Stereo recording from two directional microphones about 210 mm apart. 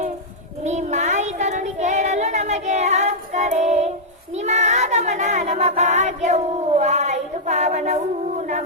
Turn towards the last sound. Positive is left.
turn(degrees=-35)  # may be behind; listen again after turning